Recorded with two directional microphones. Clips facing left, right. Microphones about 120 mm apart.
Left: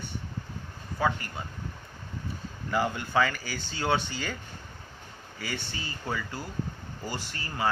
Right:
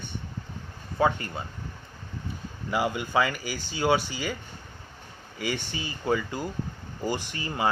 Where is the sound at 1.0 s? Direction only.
25° right (ahead or behind).